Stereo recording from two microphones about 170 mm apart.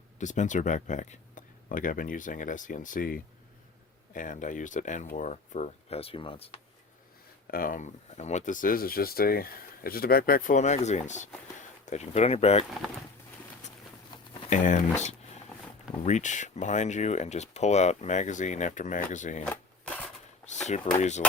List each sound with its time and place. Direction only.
0.2 s speech: 45° left (ahead or behind)
7.4 s speech: 55° left (ahead or behind); by 12.6 s 35° left (ahead or behind)
13.6 s a sound: 45° left (ahead or behind)
14.5 s speech: 50° left (ahead or behind)
19.8 s a sound: 5° left (ahead or behind)
20.7 s speech: 45° left (ahead or behind)